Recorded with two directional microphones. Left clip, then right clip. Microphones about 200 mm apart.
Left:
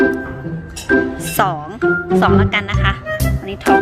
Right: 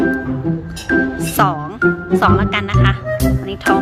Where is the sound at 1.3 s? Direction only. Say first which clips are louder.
Right 1 dB; 5° left (ahead or behind).